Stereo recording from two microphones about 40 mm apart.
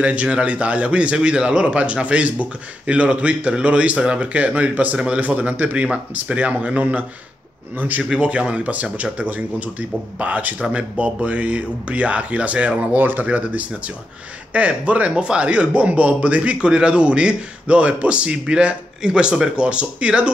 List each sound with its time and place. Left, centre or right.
0.0 s speech: right
4.9 s speech: right
5.5 s speech: right
7.7 s a man's voice: right
8.2 s speech: right
13.0 s a man's voice: right
13.3 s speech: right; by 19.5 s centre
19.5 s speech: right